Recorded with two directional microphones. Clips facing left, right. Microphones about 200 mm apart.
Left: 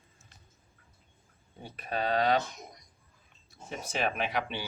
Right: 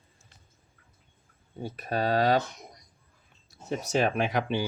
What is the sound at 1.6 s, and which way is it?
Speech, 40° right (ahead or behind).